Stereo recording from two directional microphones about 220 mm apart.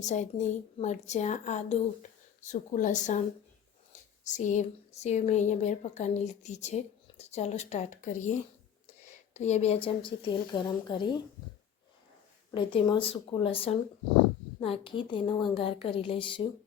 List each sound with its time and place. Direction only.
0.0 s a woman's voice: 35° left (ahead or behind)
4.2 s a woman's voice: 35° left (ahead or behind)
12.5 s a woman's voice: 20° left (ahead or behind)